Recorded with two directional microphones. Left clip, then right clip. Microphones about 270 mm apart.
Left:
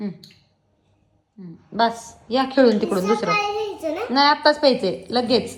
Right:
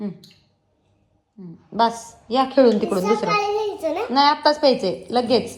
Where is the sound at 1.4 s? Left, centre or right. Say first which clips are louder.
Right 1 dB; centre.